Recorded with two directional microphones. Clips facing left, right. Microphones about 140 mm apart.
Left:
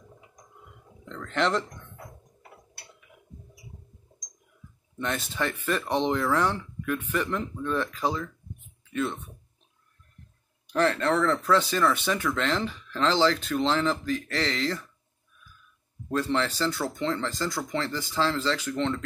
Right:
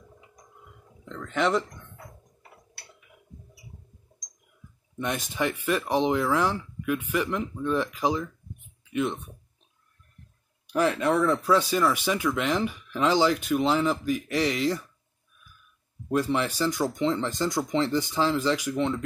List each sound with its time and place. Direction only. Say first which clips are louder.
1.0 s speech: right 1 dB; 5° right (ahead or behind)
4.9 s speech: right 1 dB; 15° right (ahead or behind)
10.7 s speech: right 1 dB; 10° right (ahead or behind)
16.1 s speech: right 1 dB; 15° right (ahead or behind)